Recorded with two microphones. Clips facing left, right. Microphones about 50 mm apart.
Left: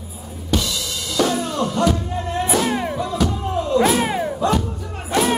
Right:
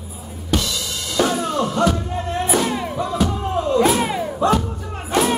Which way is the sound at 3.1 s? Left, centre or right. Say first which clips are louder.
Right 2 dB; centre.